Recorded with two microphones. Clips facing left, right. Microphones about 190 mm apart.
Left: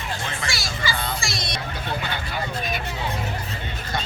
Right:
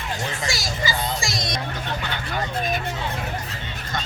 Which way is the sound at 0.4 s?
40° right (ahead or behind).